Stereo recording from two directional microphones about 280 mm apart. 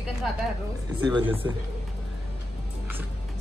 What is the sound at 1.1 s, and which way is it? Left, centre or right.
Speech, centre.